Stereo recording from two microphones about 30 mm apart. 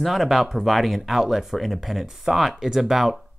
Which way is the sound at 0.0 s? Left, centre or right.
Centre.